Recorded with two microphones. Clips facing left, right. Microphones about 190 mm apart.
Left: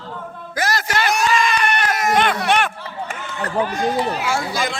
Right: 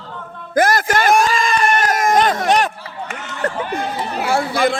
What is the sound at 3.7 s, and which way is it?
Speech, 60° right (ahead or behind).